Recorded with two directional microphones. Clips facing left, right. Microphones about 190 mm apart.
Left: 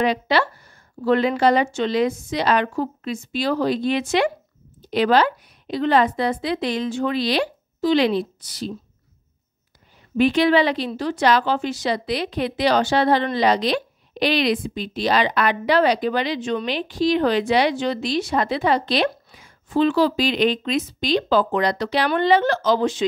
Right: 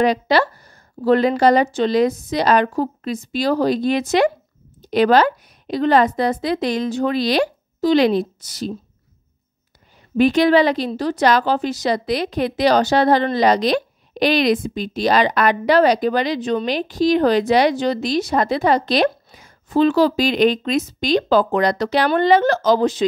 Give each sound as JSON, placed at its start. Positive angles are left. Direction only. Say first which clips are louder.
{"t": 0.0, "sound": "a woman's voice", "louder": "right 3 dB", "side_deg": -40}
{"t": 10.1, "sound": "a woman's voice", "louder": "right 3 dB", "side_deg": -40}